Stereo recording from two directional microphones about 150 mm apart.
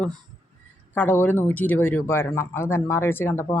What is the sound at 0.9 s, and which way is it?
Speech, 15° left (ahead or behind).